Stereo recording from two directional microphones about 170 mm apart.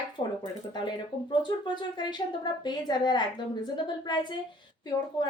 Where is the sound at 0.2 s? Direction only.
30° left (ahead or behind).